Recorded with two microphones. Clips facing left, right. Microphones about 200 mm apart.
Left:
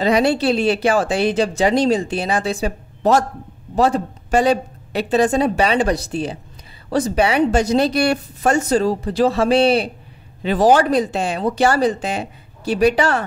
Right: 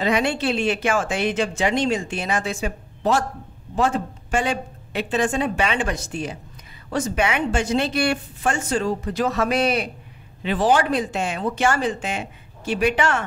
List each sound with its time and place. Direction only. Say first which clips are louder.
0.0 s speech: left 5 dB; 35° left (ahead or behind)